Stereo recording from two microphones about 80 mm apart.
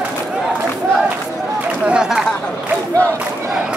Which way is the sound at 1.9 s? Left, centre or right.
Centre.